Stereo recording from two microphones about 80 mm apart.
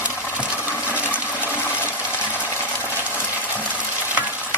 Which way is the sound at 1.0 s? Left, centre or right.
Left.